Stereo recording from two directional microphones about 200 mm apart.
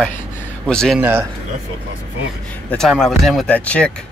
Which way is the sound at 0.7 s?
5° left (ahead or behind).